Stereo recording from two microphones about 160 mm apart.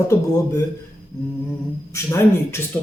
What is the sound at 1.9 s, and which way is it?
Speech, 15° left (ahead or behind).